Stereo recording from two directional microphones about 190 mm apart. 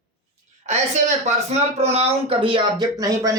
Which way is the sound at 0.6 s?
35° right (ahead or behind).